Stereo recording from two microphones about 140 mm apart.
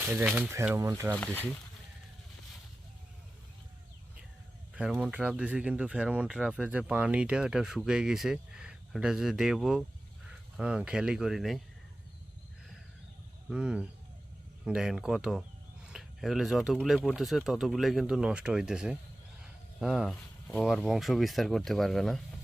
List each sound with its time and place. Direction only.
0.0 s speech: 15° right (ahead or behind)
1.1 s speech: 10° left (ahead or behind)
4.7 s speech: 5° right (ahead or behind)
13.5 s speech: 5° right (ahead or behind)